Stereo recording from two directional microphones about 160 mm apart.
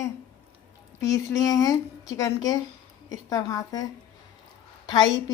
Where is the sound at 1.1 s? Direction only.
20° left (ahead or behind).